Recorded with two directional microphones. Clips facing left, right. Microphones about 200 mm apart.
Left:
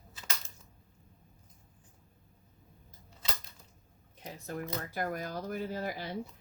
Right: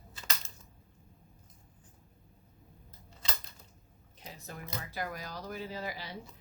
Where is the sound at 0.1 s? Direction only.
5° left (ahead or behind).